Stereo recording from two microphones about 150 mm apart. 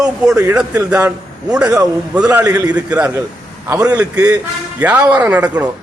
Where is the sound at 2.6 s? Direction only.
10° right (ahead or behind).